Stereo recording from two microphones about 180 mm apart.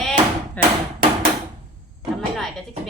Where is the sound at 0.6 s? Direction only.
10° left (ahead or behind).